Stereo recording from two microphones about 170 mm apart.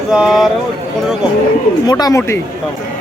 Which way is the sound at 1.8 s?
25° left (ahead or behind).